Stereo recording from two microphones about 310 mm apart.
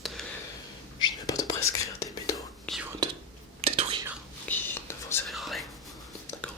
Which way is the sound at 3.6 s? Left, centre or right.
Centre.